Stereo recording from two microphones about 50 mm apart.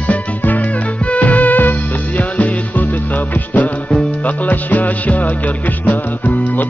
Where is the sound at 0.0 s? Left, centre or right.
Left.